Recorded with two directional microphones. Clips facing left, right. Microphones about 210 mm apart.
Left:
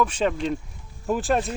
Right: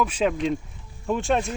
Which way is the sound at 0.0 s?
5° right (ahead or behind).